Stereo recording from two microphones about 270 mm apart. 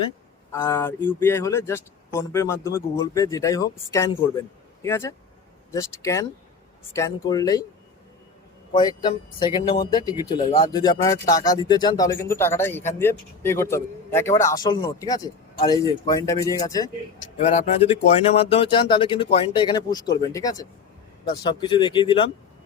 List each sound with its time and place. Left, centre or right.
0.5 s a man's voice: centre
8.7 s a man's voice: centre
10.4 s speech: left
10.7 s a man's voice: centre